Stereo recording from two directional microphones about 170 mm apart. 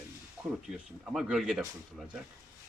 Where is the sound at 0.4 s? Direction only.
15° right (ahead or behind).